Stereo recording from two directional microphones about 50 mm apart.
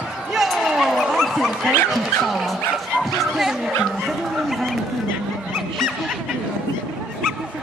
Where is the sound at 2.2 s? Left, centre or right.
Centre.